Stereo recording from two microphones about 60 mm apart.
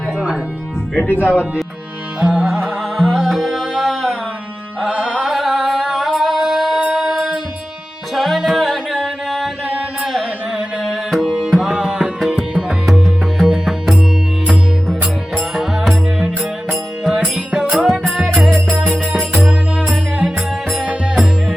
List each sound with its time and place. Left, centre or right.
0.9 s speech: left
2.2 s music: centre
2.6 s music: centre
4.9 s carnatic music: centre
6.1 s singing: centre
6.4 s music: centre
11.1 s tabla: centre
11.7 s music: centre
17.3 s music: centre
18.8 s music: right
20.8 s music: centre